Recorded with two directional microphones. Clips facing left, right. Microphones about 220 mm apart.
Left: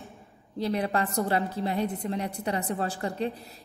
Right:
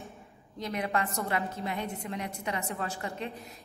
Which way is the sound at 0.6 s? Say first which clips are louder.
Left 5 dB; 35° left (ahead or behind).